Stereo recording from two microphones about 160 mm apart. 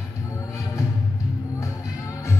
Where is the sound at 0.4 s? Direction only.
20° left (ahead or behind).